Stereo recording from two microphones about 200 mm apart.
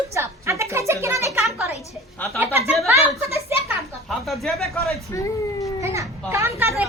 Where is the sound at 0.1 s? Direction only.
15° right (ahead or behind).